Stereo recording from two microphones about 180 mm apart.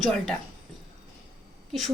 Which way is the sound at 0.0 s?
5° left (ahead or behind).